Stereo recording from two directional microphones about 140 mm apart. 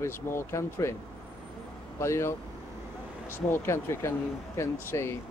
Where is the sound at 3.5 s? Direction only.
20° left (ahead or behind).